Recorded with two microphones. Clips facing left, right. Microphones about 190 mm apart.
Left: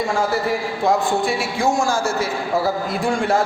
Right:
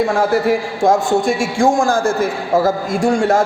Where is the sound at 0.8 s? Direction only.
45° right (ahead or behind).